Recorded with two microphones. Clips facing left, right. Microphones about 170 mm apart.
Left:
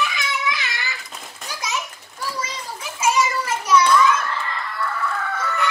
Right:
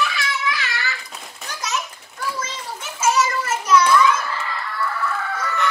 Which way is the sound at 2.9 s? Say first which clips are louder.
Right 1 dB; 10° left (ahead or behind).